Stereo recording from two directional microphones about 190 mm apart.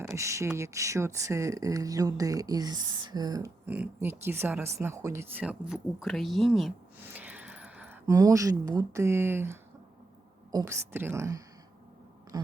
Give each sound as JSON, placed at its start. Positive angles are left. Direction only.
{"t": 0.0, "sound": "speech", "side_deg": -15}
{"t": 3.7, "sound": "speech", "side_deg": -10}
{"t": 12.3, "sound": "a sound", "side_deg": -20}